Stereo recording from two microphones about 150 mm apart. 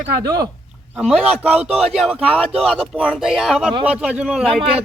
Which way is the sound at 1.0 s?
Centre (ahead or behind).